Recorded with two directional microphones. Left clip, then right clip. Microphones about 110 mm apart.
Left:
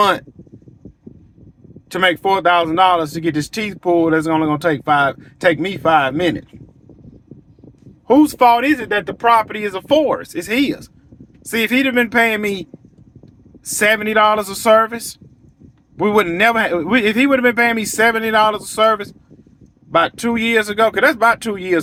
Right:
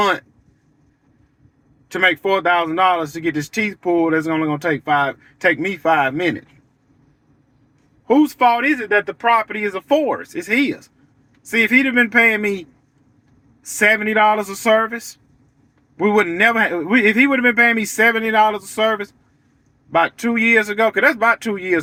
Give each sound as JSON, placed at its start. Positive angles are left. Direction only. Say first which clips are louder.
{"t": 1.9, "sound": "a man's voice", "louder": "left 1 dB", "side_deg": 30}
{"t": 5.5, "sound": "a man's voice", "louder": "left 2 dB", "side_deg": 15}
{"t": 8.0, "sound": "speech", "louder": "left 3 dB", "side_deg": 30}
{"t": 8.4, "sound": "a man's voice", "louder": "left 3 dB", "side_deg": 40}
{"t": 9.6, "sound": "a man's voice", "louder": "left 2 dB", "side_deg": 25}
{"t": 10.3, "sound": "a man's voice", "louder": "even", "side_deg": 30}
{"t": 14.0, "sound": "a man's voice", "louder": "left 1 dB", "side_deg": 30}